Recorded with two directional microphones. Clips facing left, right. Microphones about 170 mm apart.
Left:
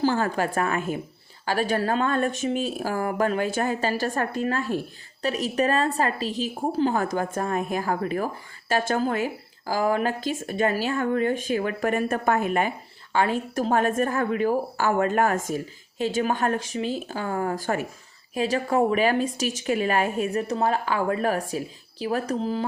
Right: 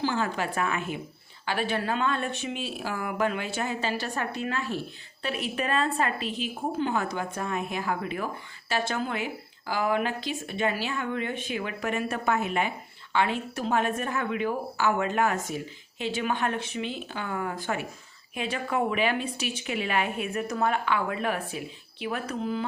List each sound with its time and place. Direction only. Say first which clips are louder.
0.0 s a woman's voice: left 5 dB; 45° left (ahead or behind)